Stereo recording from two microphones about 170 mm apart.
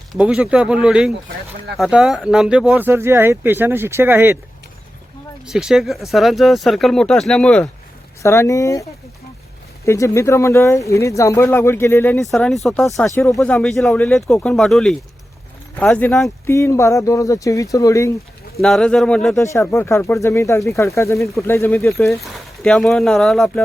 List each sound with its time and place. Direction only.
0.1 s speech: 5° right (ahead or behind)
5.5 s speech: 5° right (ahead or behind)
8.2 s speech: 15° left (ahead or behind)
12.2 s speech: centre (ahead or behind)
16.5 s speech: 15° left (ahead or behind)
18.6 s speech: 5° left (ahead or behind)
19.4 s speech: 15° left (ahead or behind)
22.2 s speech: 5° left (ahead or behind)